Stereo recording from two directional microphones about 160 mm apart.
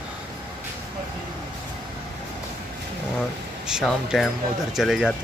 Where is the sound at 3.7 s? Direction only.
Centre (ahead or behind).